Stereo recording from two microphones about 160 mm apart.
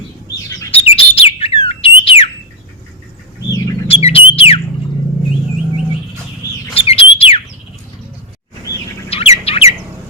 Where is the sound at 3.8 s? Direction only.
35° left (ahead or behind).